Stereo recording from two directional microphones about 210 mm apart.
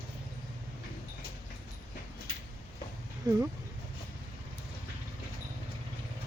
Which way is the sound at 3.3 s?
15° right (ahead or behind).